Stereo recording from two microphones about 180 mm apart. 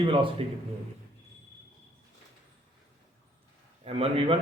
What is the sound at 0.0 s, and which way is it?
Speech, 30° right (ahead or behind).